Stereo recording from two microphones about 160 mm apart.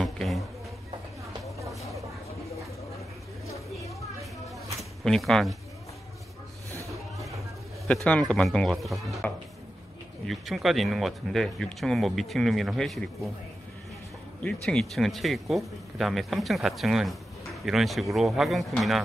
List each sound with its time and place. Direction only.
0.0 s a sound: centre (ahead or behind)
3.4 s a sound: 20° left (ahead or behind)
5.0 s speech: 5° left (ahead or behind)
6.7 s music: 20° right (ahead or behind)
7.9 s speech: 5° left (ahead or behind)
14.4 s speech: 5° left (ahead or behind)